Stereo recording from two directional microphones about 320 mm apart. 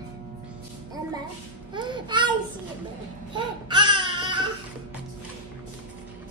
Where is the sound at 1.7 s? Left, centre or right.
Centre.